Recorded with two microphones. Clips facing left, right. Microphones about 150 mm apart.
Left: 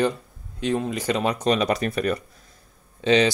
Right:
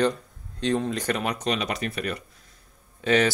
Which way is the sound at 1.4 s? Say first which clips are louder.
Left 6 dB; 40° left (ahead or behind).